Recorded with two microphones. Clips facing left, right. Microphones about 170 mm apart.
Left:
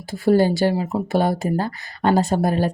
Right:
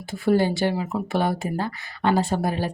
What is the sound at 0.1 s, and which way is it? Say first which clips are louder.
Speech: left 4 dB; 40° left (ahead or behind).